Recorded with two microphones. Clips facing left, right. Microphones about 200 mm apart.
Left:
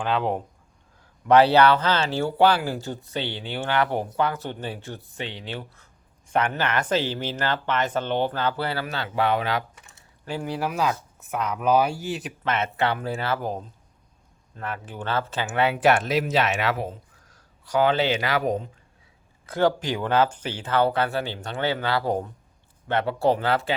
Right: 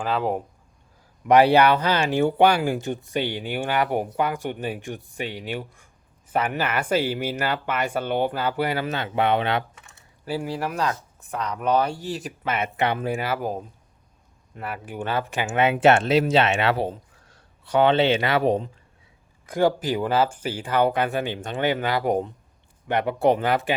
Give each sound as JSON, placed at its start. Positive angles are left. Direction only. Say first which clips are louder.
{"t": 0.0, "sound": "speech", "louder": "even", "side_deg": -5}
{"t": 10.2, "sound": "speech", "louder": "right 1 dB", "side_deg": -5}
{"t": 12.5, "sound": "speech", "louder": "even", "side_deg": -15}
{"t": 19.5, "sound": "speech", "louder": "right 1 dB", "side_deg": -10}